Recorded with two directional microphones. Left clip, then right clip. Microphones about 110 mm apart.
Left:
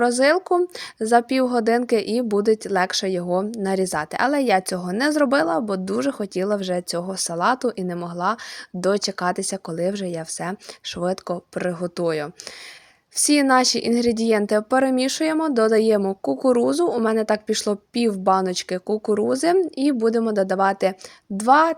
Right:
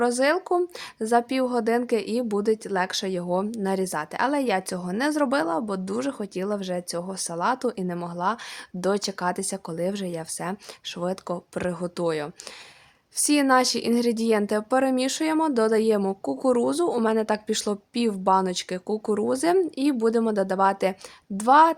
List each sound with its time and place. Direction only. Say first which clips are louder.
0.0 s speech: left 4 dB; 30° left (ahead or behind)
7.6 s speech: left 3 dB; 25° left (ahead or behind)